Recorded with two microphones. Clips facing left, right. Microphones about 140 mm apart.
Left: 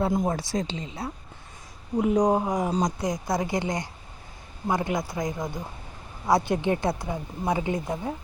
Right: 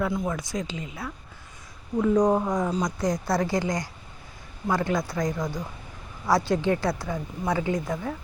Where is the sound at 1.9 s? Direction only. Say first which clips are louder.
Right 1 dB; 15° left (ahead or behind).